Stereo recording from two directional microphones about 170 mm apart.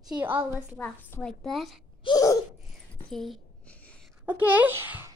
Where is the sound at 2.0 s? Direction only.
20° left (ahead or behind).